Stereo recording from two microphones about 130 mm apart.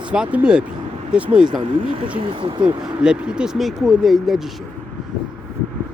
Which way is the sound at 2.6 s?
5° right (ahead or behind).